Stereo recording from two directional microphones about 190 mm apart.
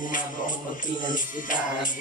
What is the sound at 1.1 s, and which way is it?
Music, 45° left (ahead or behind).